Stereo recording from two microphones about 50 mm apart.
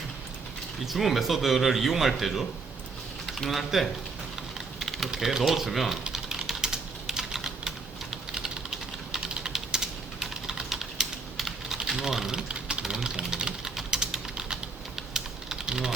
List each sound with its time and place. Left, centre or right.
0.9 s speech: centre
4.8 s typing: centre
5.1 s speech: centre
6.1 s typing: centre
9.1 s typing: centre
12.3 s typing: centre